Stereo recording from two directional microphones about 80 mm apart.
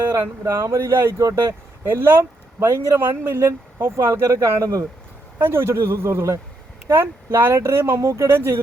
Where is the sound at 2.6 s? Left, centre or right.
Right.